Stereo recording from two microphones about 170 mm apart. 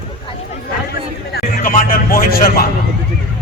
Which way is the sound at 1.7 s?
55° left (ahead or behind).